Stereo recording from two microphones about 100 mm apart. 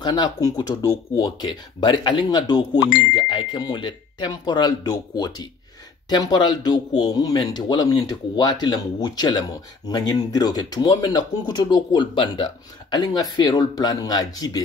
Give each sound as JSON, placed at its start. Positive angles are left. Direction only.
{"t": 0.0, "sound": "speech", "side_deg": 50}